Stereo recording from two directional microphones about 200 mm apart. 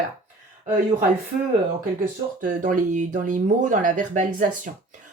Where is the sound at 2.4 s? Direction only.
40° right (ahead or behind).